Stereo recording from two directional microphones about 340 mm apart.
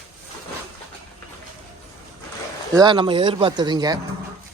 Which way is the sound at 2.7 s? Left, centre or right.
Centre.